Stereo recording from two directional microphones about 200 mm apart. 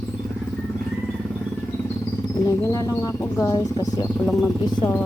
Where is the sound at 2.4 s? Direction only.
15° left (ahead or behind).